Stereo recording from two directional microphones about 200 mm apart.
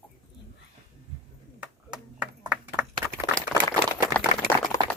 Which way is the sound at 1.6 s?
5° right (ahead or behind).